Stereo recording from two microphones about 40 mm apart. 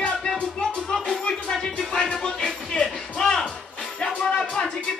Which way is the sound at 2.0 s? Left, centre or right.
Left.